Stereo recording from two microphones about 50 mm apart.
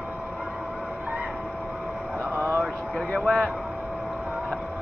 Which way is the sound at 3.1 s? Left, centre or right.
Centre.